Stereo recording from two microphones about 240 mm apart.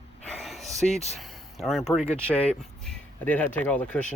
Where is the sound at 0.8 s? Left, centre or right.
Left.